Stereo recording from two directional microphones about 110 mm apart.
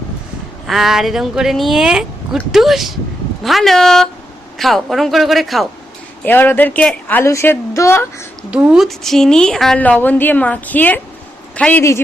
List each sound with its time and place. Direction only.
0.7 s speech: 5° right (ahead or behind)
6.2 s a woman's voice: 15° left (ahead or behind)
7.3 s a woman's voice: 25° left (ahead or behind)
8.4 s speech: 10° right (ahead or behind)
9.8 s a woman's voice: 15° left (ahead or behind)